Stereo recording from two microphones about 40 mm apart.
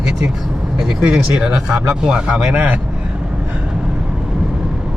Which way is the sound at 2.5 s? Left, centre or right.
Right.